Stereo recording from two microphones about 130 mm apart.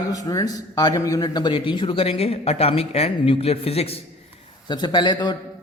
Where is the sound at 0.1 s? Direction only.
25° left (ahead or behind); by 3.9 s 50° left (ahead or behind).